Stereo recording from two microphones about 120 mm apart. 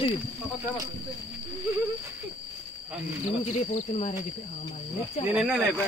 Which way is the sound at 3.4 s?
70° left (ahead or behind).